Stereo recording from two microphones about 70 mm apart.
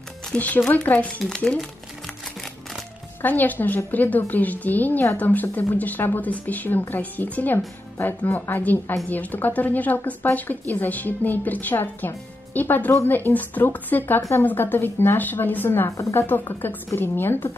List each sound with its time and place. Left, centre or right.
0.4 s speech: left
3.2 s speech: left
16.0 s speech: left
16.6 s a woman's voice: left